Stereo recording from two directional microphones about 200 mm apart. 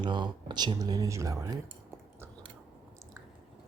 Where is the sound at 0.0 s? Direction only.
20° right (ahead or behind).